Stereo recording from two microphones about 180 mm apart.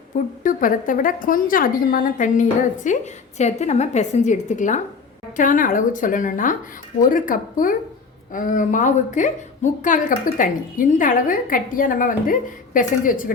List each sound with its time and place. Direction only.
0.1 s a woman's voice: 50° left (ahead or behind)